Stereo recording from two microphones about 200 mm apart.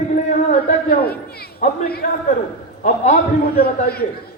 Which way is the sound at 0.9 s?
50° left (ahead or behind).